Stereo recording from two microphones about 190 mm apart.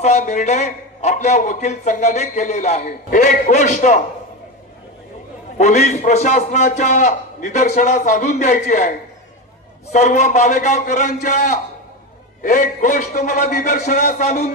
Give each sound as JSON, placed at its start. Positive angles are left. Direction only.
{"t": 0.0, "sound": "a man's voice", "side_deg": 35}
{"t": 5.6, "sound": "a man's voice", "side_deg": 35}
{"t": 9.9, "sound": "a man's voice", "side_deg": 40}